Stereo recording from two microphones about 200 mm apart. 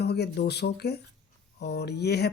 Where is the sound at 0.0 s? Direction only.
55° left (ahead or behind).